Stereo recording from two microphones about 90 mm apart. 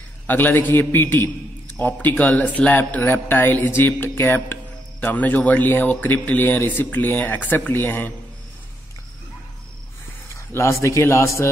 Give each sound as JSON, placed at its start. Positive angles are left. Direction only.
{"t": 0.3, "sound": "a man's voice", "side_deg": 20}
{"t": 10.3, "sound": "a man's voice", "side_deg": 30}